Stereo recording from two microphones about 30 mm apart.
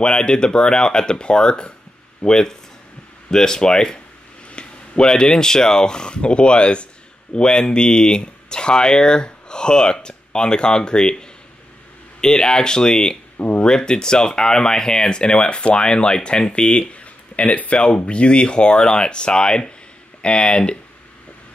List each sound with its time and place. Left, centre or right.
0.0 s speech: left
4.5 s a sound: left
5.0 s speech: left
13.4 s a sound: left
13.7 s speech: left
17.4 s speech: left